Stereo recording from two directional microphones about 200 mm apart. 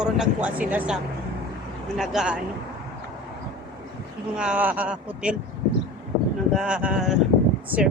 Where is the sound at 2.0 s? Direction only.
5° right (ahead or behind).